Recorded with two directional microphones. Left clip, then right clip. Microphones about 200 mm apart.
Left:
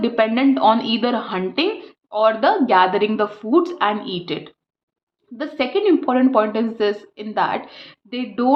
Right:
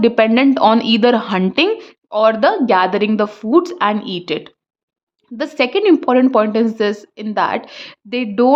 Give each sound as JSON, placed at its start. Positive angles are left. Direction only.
{"t": 0.0, "sound": "a woman's voice", "side_deg": -40}